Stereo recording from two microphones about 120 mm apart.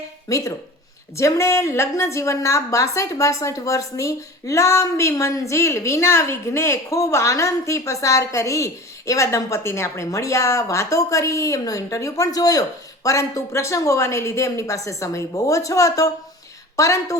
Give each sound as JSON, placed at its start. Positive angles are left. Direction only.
{"t": 0.3, "sound": "a woman's voice", "side_deg": 25}